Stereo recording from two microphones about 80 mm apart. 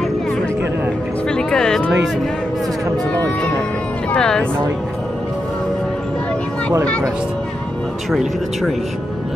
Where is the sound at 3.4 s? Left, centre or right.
Centre.